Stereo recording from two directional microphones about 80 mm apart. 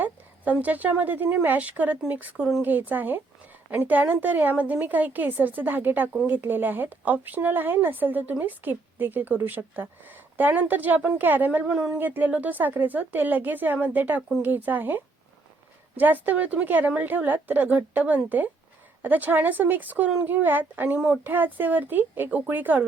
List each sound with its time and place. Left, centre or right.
0.0 s a woman's voice: right
11.9 s a woman's voice: right